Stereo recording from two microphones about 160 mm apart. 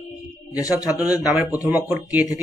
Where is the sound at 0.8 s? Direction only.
20° left (ahead or behind).